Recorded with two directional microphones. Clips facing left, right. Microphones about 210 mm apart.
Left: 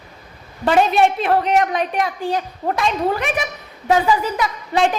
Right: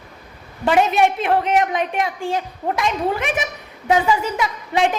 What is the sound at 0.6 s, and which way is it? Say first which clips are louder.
A woman's voice: left 1 dB; 20° right (ahead or behind).